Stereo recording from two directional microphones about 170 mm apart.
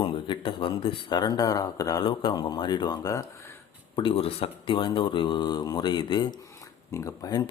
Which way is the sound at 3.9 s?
30° left (ahead or behind).